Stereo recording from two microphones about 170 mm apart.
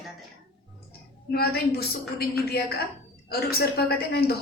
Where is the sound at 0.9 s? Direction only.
65° left (ahead or behind).